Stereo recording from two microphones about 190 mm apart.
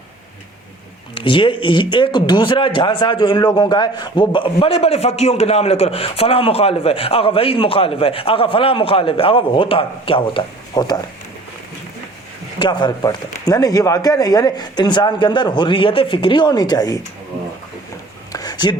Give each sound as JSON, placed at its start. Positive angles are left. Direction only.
{"t": 1.1, "sound": "a man's voice", "side_deg": 25}
{"t": 12.5, "sound": "a man's voice", "side_deg": 25}
{"t": 18.3, "sound": "a sound", "side_deg": 20}